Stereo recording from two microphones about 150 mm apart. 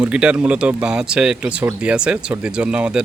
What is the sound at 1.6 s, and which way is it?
Speech, 15° right (ahead or behind).